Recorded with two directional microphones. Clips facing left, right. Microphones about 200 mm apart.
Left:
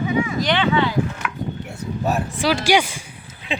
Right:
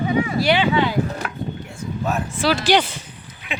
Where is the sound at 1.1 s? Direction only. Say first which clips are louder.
Right 1 dB; 35° right (ahead or behind).